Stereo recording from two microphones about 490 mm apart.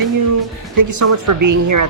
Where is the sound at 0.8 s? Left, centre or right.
Right.